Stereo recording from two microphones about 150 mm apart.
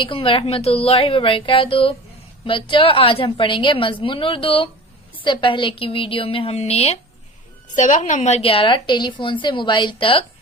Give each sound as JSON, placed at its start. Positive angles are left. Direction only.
{"t": 0.0, "sound": "a woman's voice", "side_deg": 35}
{"t": 7.8, "sound": "a woman's voice", "side_deg": 55}